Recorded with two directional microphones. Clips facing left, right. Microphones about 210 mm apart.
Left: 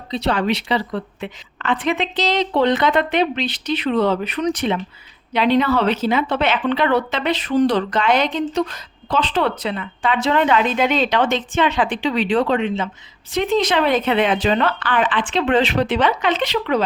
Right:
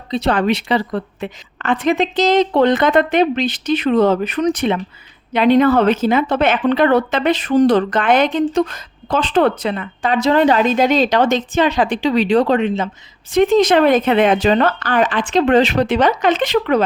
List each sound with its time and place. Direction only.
0.1 s speech: 50° right (ahead or behind)